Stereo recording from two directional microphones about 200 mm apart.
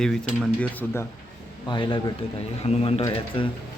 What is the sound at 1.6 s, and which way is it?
Speech, 25° left (ahead or behind).